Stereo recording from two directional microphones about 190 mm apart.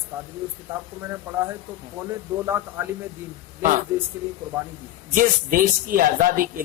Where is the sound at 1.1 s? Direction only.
15° right (ahead or behind).